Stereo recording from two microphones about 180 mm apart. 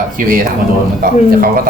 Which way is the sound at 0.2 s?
50° right (ahead or behind).